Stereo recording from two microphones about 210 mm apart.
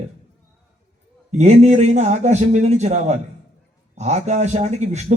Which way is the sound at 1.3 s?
30° right (ahead or behind).